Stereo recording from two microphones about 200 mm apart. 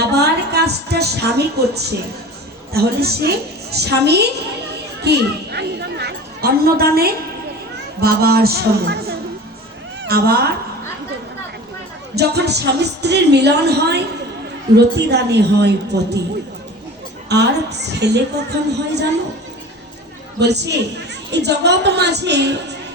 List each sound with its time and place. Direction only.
0.1 s a sound: 55° right (ahead or behind)
2.7 s a woman's voice: 50° right (ahead or behind)
12.1 s speech: 55° right (ahead or behind)
17.2 s speech: 55° right (ahead or behind)
20.4 s speech: 55° right (ahead or behind)